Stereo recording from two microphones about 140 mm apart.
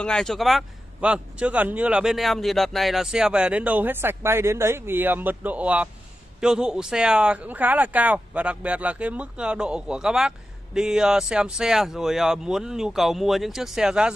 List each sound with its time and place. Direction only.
0.0 s a man's voice: 5° left (ahead or behind)